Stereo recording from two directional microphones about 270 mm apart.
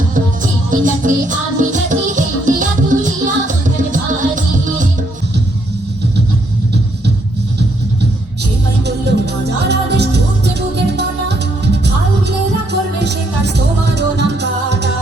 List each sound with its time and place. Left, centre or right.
0.7 s music: right
9.0 s music: right
13.0 s music: right